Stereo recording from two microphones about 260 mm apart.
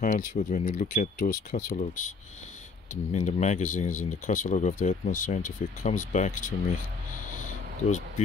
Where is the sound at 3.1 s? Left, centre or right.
Left.